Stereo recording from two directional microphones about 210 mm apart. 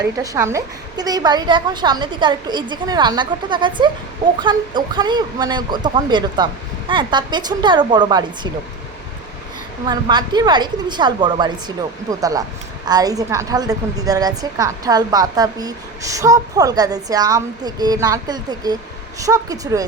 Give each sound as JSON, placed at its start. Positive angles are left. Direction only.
{"t": 0.0, "sound": "speech", "side_deg": -15}
{"t": 9.8, "sound": "a woman's voice", "side_deg": -20}